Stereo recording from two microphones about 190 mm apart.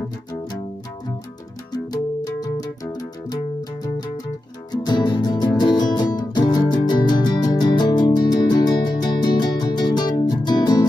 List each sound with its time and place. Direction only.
2.4 s music: 20° left (ahead or behind)
4.8 s music: 25° left (ahead or behind)